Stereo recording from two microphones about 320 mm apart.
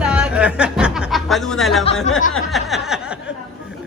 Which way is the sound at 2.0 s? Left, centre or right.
Left.